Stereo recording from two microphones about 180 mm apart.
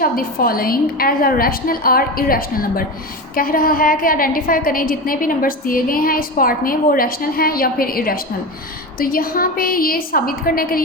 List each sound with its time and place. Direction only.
0.0 s a woman's voice: 55° left (ahead or behind)